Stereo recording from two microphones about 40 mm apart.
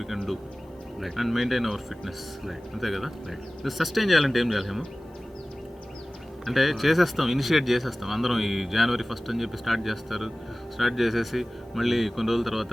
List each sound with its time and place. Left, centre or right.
0.0 s speech: centre
6.4 s speech: centre